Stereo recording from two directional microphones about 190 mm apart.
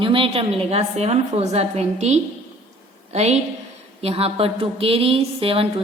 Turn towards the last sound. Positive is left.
turn(degrees=-30)  # may be behind; listen again after turning